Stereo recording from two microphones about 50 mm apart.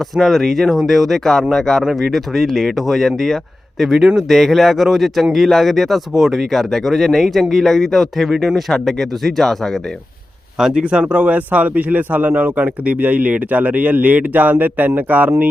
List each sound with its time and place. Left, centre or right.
0.2 s a man's voice: centre
1.8 s a man's voice: centre
4.3 s a man's voice: centre
10.6 s a man's voice: centre
10.8 s a man's voice: right